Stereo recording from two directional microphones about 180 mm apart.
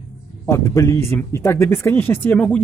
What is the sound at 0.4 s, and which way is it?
Speech, 15° left (ahead or behind).